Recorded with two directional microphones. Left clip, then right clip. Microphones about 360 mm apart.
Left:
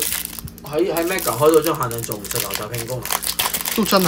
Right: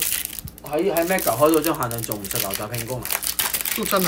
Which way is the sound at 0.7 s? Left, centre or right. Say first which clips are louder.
Left 1 dB; centre.